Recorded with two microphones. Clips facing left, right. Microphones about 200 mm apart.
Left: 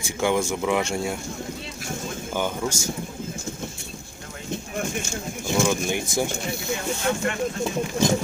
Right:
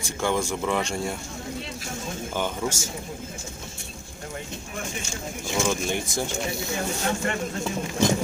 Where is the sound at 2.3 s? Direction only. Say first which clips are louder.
Left 2 dB; 10° left (ahead or behind).